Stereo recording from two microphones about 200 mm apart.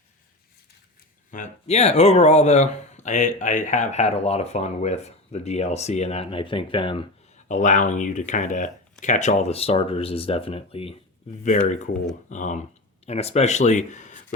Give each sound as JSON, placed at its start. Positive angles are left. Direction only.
{"t": 1.3, "sound": "speech", "side_deg": 35}
{"t": 7.4, "sound": "speech", "side_deg": 40}